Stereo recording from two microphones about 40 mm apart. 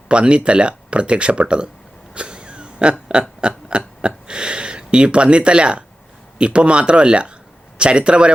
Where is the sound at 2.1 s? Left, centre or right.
Right.